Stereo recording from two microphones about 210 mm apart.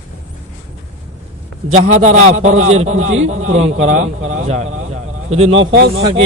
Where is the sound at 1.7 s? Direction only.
35° right (ahead or behind).